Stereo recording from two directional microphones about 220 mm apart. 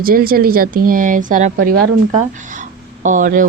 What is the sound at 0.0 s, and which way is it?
A woman's voice, 40° right (ahead or behind).